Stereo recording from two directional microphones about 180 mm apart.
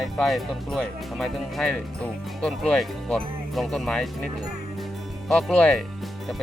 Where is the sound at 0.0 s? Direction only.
Centre (ahead or behind).